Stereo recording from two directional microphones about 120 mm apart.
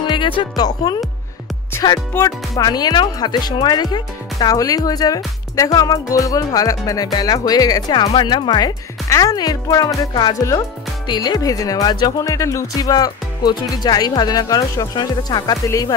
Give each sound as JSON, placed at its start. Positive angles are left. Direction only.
{"t": 0.0, "sound": "speech", "side_deg": 45}